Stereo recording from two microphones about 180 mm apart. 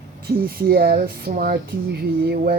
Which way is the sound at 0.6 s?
60° right (ahead or behind).